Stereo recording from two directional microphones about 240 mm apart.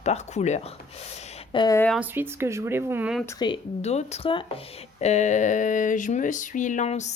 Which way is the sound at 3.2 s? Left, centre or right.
Centre.